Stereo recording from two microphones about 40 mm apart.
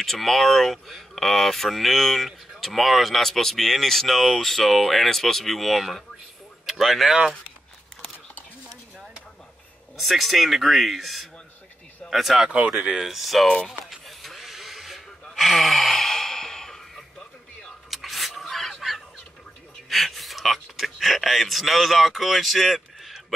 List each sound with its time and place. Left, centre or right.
0.0 s speech: centre
9.9 s speech: centre
12.4 s speech: right
12.9 s speech: centre
13.7 s a sound: centre
15.3 s sigh: centre
17.6 s a sound: centre
19.9 s gasp: centre